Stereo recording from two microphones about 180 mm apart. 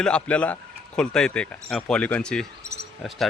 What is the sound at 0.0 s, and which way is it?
Speech, 5° left (ahead or behind).